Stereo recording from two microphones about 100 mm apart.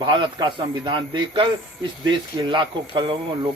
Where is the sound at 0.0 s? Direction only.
50° right (ahead or behind).